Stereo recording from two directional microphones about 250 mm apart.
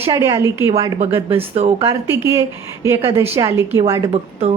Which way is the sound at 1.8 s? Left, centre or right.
Centre.